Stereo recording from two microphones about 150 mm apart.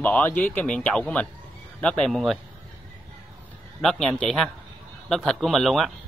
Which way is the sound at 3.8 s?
5° left (ahead or behind).